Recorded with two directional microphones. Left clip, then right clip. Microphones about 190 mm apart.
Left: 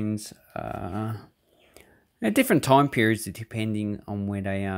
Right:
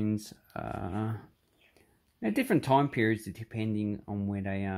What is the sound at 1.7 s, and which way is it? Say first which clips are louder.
Speech: left 8 dB; 30° left (ahead or behind).